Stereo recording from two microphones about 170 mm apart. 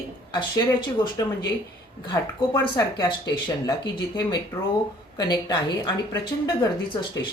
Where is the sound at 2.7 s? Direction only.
25° left (ahead or behind).